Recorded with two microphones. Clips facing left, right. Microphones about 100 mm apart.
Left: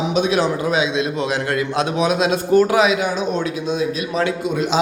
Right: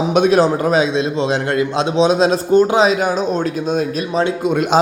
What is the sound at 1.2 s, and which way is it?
A man's voice, 30° right (ahead or behind).